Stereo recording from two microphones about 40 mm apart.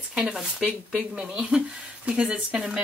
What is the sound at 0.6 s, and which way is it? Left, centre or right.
Speech, right.